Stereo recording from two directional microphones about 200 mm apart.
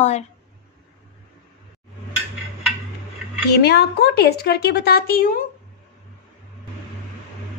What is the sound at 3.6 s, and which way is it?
A woman's voice, 55° left (ahead or behind).